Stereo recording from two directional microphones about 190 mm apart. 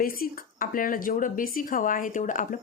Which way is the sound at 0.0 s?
50° left (ahead or behind).